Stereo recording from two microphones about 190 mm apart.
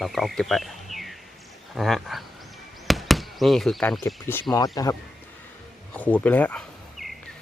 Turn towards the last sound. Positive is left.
turn(degrees=0)  # may be behind; listen again after turning